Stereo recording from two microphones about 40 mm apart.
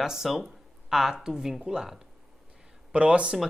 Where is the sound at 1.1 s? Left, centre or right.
Centre.